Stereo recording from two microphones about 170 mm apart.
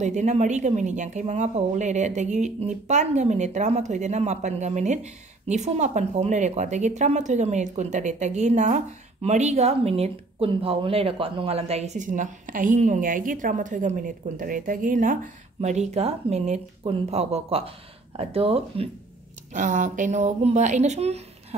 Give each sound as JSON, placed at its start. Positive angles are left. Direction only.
{"t": 0.0, "sound": "speech", "side_deg": -45}
{"t": 19.5, "sound": "speech", "side_deg": -50}